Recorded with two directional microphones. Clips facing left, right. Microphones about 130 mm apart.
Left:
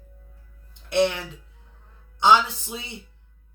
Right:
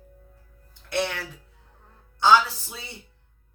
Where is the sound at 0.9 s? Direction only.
20° left (ahead or behind).